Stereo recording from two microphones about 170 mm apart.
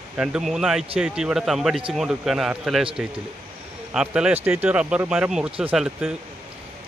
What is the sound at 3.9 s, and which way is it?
A man's voice, 5° right (ahead or behind).